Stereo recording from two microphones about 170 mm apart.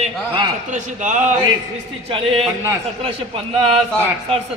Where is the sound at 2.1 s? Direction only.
35° right (ahead or behind).